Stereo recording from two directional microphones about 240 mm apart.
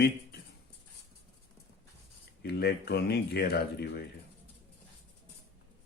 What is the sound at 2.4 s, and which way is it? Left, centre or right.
Speech, left.